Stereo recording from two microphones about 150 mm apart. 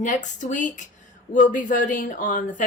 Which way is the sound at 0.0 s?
55° left (ahead or behind).